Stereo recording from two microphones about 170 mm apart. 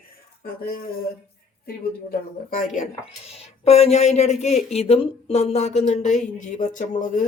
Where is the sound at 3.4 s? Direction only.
35° left (ahead or behind).